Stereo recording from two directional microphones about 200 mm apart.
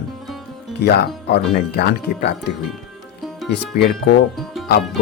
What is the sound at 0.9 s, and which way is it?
Speech, 55° left (ahead or behind).